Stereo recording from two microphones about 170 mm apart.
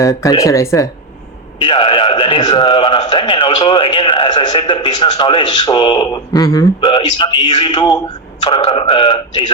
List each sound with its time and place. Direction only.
0.0 s a man's voice: 20° left (ahead or behind)
1.6 s a man's voice: 30° left (ahead or behind)